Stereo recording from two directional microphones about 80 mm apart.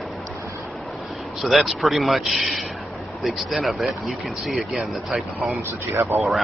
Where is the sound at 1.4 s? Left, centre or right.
Centre.